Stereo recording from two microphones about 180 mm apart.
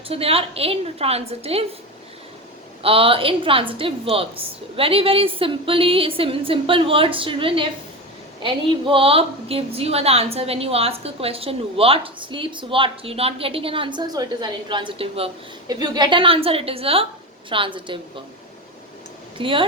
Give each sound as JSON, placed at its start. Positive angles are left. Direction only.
{"t": 0.1, "sound": "a woman's voice", "side_deg": -35}
{"t": 2.8, "sound": "a woman's voice", "side_deg": -30}
{"t": 15.6, "sound": "a woman's voice", "side_deg": -20}
{"t": 19.4, "sound": "a woman's voice", "side_deg": -30}